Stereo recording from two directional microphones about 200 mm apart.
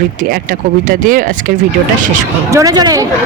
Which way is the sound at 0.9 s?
40° right (ahead or behind).